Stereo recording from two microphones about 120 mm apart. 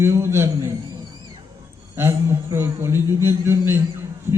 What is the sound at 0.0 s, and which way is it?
Speech, 20° right (ahead or behind).